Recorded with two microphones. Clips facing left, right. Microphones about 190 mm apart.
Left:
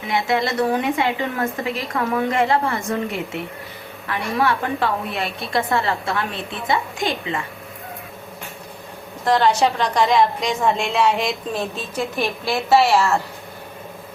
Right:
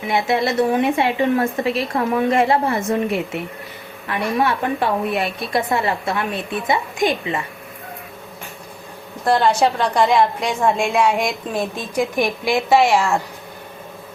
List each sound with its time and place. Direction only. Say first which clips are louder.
0.1 s a woman's voice: right 2 dB; 25° right (ahead or behind)
4.1 s a woman's voice: right 1 dB; 20° right (ahead or behind)
9.2 s a woman's voice: right 1 dB; 10° right (ahead or behind)